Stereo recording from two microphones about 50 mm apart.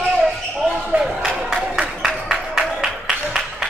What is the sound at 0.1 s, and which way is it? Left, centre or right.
Basketball bounce, centre.